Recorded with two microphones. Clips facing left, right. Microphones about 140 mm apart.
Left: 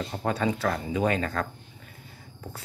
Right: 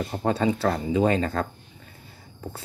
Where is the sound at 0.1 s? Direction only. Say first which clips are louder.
Right 4 dB; 30° right (ahead or behind).